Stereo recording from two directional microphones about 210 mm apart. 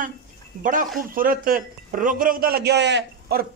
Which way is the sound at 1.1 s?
40° right (ahead or behind).